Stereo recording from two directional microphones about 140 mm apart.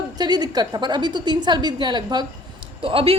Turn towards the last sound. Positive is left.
turn(degrees=-40)  # may be behind; listen again after turning